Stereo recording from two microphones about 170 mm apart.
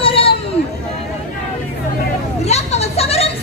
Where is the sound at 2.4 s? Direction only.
40° left (ahead or behind).